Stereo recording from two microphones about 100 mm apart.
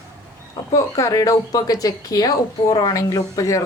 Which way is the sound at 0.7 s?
30° left (ahead or behind).